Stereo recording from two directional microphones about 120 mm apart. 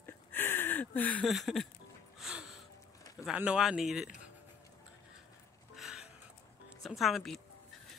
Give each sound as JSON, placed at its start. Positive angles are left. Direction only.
{"t": 0.0, "sound": "a sound", "side_deg": 15}
{"t": 1.2, "sound": "speech", "side_deg": 0}
{"t": 2.1, "sound": "music", "side_deg": -5}
{"t": 3.3, "sound": "speech", "side_deg": -5}
{"t": 5.8, "sound": "music", "side_deg": -5}
{"t": 6.8, "sound": "speech", "side_deg": 0}